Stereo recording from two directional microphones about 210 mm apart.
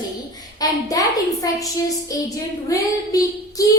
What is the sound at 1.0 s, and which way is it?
Child singing, 15° left (ahead or behind).